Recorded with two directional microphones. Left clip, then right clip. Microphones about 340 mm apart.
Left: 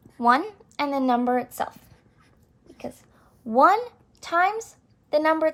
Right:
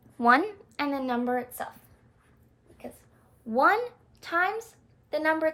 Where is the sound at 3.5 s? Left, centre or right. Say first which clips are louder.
Left 5 dB; centre.